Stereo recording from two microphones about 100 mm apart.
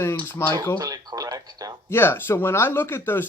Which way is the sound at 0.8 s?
40° right (ahead or behind).